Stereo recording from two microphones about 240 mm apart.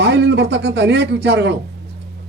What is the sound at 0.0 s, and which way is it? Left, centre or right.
Speech, right.